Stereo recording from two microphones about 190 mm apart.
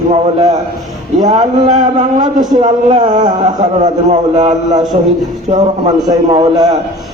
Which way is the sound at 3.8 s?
35° right (ahead or behind).